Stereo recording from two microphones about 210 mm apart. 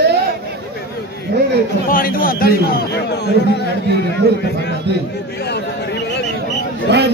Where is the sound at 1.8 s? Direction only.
45° left (ahead or behind).